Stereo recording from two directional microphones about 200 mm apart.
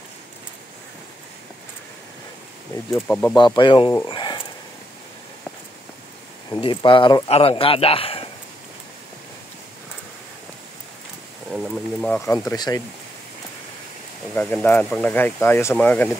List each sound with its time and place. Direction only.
2.7 s speech: 10° left (ahead or behind)
3.3 s speech: 20° left (ahead or behind)
3.9 s a sound: 20° left (ahead or behind)
6.6 s speech: 25° left (ahead or behind)
11.5 s a sound: 5° right (ahead or behind); by 12.8 s 20° left (ahead or behind)
14.3 s speech: 5° left (ahead or behind)